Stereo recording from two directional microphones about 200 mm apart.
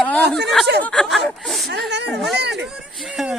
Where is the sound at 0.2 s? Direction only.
55° right (ahead or behind).